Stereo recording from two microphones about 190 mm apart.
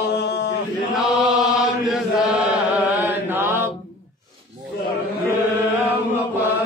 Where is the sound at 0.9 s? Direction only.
Centre (ahead or behind).